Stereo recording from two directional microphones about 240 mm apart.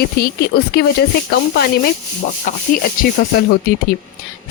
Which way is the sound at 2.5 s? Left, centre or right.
Left.